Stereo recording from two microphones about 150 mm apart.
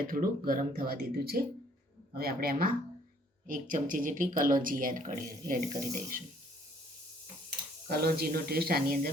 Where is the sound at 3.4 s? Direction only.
65° right (ahead or behind).